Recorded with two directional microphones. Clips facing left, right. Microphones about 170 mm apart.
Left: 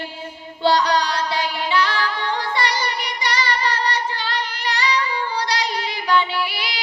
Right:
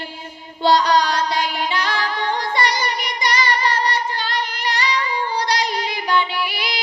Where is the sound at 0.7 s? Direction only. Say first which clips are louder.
Right 2 dB; 45° right (ahead or behind).